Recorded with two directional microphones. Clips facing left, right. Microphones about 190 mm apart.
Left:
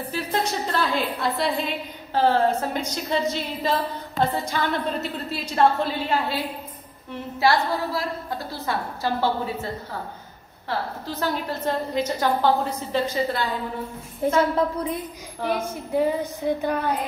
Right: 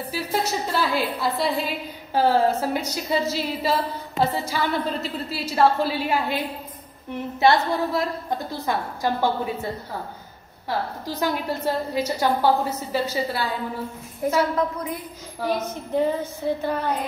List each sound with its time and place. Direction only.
0.1 s a woman's voice: 5° right (ahead or behind)
11.1 s a woman's voice: 10° right (ahead or behind)
14.2 s a woman's voice: 30° left (ahead or behind)
15.4 s a sound: 10° left (ahead or behind)